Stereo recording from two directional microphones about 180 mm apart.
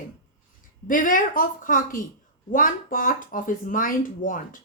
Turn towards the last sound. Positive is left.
turn(degrees=50)  # may be behind; listen again after turning